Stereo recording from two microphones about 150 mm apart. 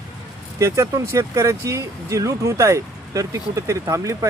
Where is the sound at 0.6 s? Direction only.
20° right (ahead or behind).